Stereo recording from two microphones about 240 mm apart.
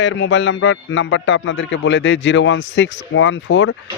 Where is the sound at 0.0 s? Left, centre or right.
Left.